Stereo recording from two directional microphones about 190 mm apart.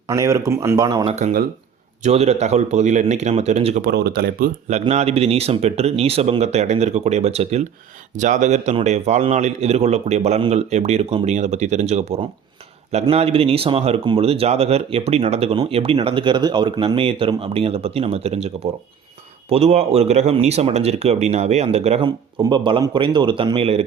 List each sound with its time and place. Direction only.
0.1 s speech: 15° right (ahead or behind)
1.0 s speech: 40° right (ahead or behind)
3.8 s speech: 55° right (ahead or behind); by 23.8 s 30° right (ahead or behind)